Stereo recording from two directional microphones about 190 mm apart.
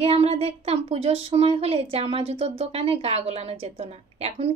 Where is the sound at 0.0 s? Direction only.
30° right (ahead or behind).